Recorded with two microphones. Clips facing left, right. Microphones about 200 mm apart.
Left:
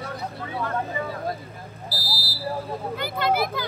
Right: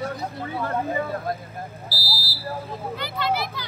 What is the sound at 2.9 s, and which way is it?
Vehicle, 50° left (ahead or behind).